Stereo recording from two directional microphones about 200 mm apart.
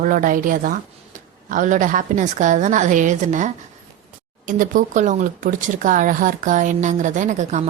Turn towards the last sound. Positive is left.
turn(degrees=-35)  # may be behind; listen again after turning